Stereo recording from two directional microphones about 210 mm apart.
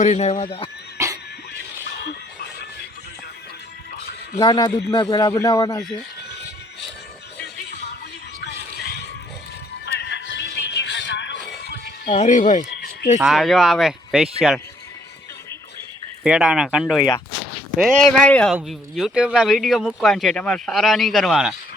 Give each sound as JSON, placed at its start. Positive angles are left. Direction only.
{"t": 0.0, "sound": "speech", "side_deg": 30}
{"t": 0.9, "sound": "a sound", "side_deg": -15}
{"t": 4.4, "sound": "speech", "side_deg": 20}
{"t": 7.4, "sound": "music", "side_deg": 50}
{"t": 9.8, "sound": "music", "side_deg": 55}
{"t": 12.1, "sound": "speech", "side_deg": 35}
{"t": 13.1, "sound": "speech", "side_deg": 0}
{"t": 16.2, "sound": "speech", "side_deg": -5}